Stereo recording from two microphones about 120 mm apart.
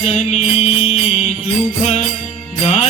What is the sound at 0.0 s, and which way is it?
Music, 65° left (ahead or behind).